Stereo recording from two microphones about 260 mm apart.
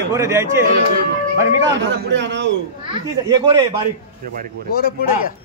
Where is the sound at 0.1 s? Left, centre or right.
Centre.